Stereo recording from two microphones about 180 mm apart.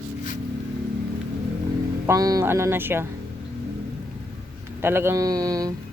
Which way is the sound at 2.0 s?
20° right (ahead or behind).